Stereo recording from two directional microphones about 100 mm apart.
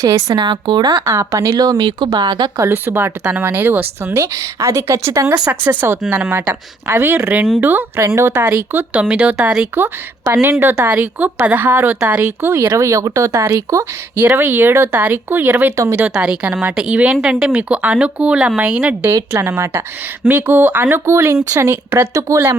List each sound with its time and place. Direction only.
0.0 s a woman's voice: 35° right (ahead or behind)
1.0 s speech: 30° right (ahead or behind); by 2.5 s 50° right (ahead or behind)
2.6 s a woman's voice: 20° right (ahead or behind)
4.2 s a woman's voice: 30° right (ahead or behind)
5.5 s a woman's voice: 20° right (ahead or behind)
19.0 s a woman's voice: 30° right (ahead or behind)